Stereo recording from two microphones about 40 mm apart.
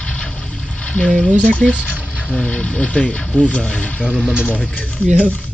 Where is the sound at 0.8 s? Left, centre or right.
Left.